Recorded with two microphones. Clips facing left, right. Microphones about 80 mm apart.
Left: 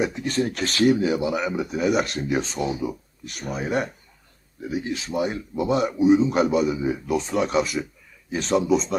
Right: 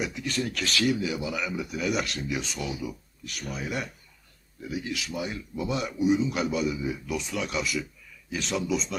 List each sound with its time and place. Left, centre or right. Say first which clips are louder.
0.0 s speech: left 7 dB; left
5.1 s speech: left 8 dB; left
6.8 s speech: left 7 dB; left